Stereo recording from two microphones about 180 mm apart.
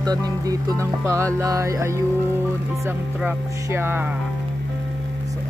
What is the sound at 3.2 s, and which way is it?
Music, 10° right (ahead or behind).